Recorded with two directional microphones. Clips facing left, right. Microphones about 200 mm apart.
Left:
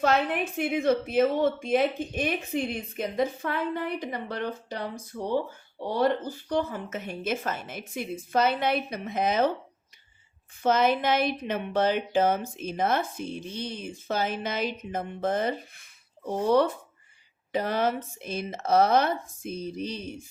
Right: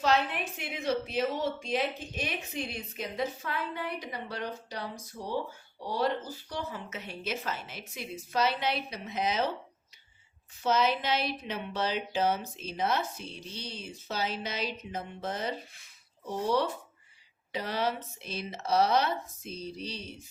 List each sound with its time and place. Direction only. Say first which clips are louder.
0.0 s speech: left 4 dB; 50° left (ahead or behind)
5.8 s speech: left 5 dB; 50° left (ahead or behind)
10.6 s speech: left 4 dB; 50° left (ahead or behind)